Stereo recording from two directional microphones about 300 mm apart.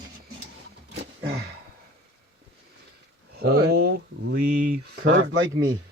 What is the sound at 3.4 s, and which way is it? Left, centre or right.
Speech, right.